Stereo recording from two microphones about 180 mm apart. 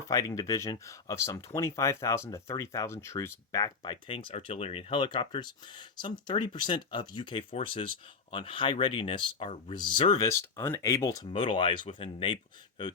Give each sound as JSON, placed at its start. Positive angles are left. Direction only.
{"t": 0.0, "sound": "speech", "side_deg": 20}
{"t": 10.2, "sound": "speech", "side_deg": 15}
{"t": 11.3, "sound": "speech", "side_deg": 30}